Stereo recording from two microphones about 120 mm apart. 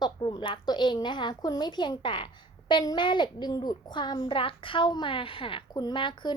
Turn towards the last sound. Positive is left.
turn(degrees=40)  # may be behind; listen again after turning